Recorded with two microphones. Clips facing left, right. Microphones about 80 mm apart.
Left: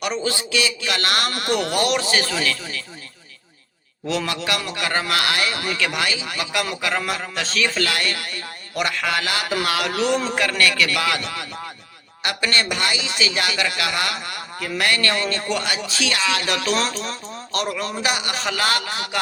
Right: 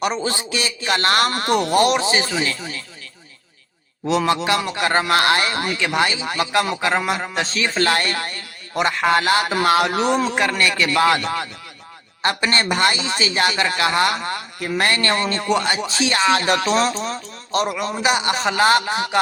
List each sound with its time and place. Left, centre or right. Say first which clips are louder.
0.0 s a man's voice: right 2 dB; right
4.3 s a man's voice: right 6 dB; right
17.9 s speech: right 5 dB; right